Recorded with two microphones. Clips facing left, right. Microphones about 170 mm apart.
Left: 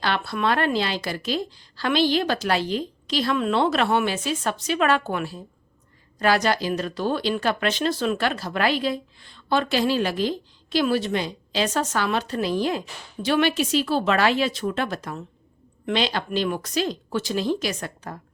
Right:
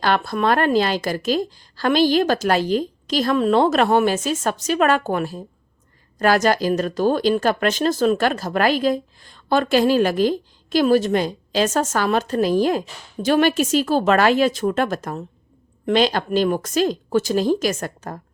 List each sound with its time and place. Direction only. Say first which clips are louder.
0.0 s speech: right 5 dB; 45° right (ahead or behind)